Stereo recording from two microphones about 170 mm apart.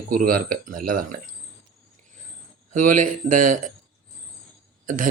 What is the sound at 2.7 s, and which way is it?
Speech, 50° right (ahead or behind).